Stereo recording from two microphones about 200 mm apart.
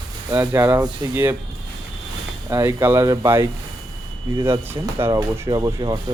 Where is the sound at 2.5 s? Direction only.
15° right (ahead or behind).